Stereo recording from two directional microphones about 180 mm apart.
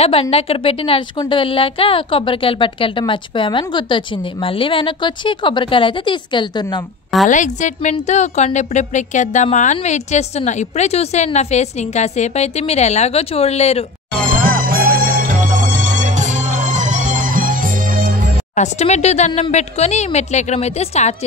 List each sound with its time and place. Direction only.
0.0 s a woman's voice: 35° left (ahead or behind)
7.2 s a woman's voice: 45° left (ahead or behind)
14.4 s music: 55° right (ahead or behind)
18.5 s a woman's voice: 40° left (ahead or behind)